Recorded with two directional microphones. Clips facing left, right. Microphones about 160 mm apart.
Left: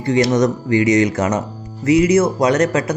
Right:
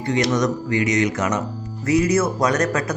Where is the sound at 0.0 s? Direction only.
30° left (ahead or behind).